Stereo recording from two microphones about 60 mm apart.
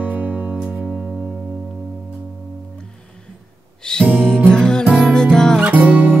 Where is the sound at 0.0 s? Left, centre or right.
Right.